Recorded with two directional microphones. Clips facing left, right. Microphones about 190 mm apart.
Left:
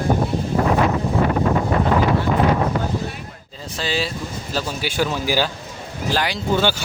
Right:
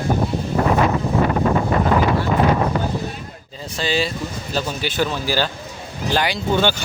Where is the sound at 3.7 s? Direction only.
Centre (ahead or behind).